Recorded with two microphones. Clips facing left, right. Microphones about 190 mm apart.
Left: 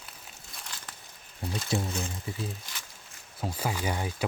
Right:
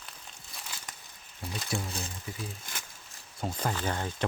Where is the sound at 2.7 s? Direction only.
50° right (ahead or behind).